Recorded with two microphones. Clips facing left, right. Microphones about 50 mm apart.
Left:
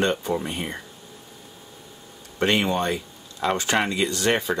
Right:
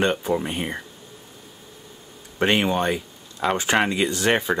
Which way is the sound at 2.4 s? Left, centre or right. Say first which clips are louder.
Right 1 dB; centre.